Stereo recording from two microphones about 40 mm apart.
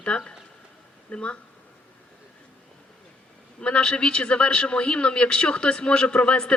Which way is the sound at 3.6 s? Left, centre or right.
Left.